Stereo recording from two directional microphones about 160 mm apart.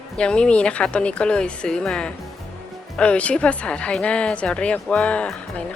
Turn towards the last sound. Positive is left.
turn(degrees=5)  # may be behind; listen again after turning